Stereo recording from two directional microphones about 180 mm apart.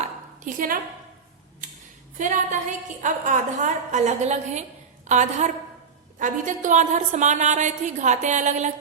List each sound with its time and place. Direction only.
0.0 s dishes: 50° right (ahead or behind)
2.1 s a woman's voice: 45° right (ahead or behind)